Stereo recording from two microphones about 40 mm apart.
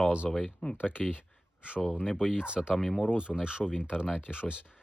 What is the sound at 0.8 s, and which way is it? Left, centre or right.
Speech, left.